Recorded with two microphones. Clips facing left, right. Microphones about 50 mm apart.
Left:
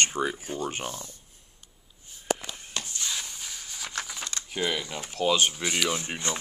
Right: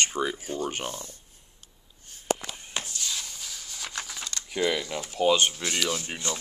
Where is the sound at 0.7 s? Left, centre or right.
Right.